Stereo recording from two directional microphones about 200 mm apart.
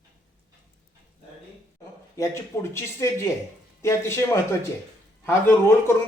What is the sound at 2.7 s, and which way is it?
A man's voice, 15° left (ahead or behind).